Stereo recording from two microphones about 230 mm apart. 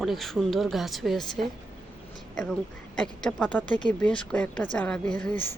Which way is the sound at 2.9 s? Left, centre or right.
Centre.